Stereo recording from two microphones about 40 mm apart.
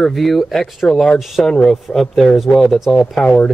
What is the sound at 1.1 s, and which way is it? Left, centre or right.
Speech, centre.